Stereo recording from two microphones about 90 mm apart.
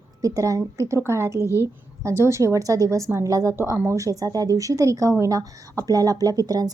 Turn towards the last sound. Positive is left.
turn(degrees=-45)  # may be behind; listen again after turning